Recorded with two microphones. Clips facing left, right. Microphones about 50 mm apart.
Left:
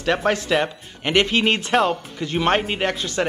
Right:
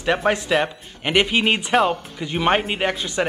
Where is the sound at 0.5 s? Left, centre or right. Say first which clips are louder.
Even; centre.